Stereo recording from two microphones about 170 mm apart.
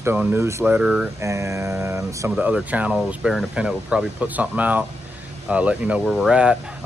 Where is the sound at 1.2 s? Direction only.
15° right (ahead or behind).